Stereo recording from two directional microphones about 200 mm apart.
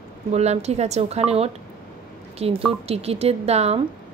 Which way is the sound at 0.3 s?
35° right (ahead or behind).